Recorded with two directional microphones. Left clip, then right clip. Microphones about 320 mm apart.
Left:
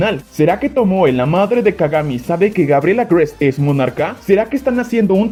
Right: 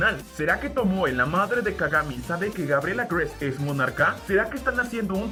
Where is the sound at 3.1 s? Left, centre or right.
Left.